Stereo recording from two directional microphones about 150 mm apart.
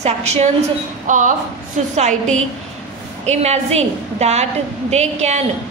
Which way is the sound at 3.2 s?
45° right (ahead or behind).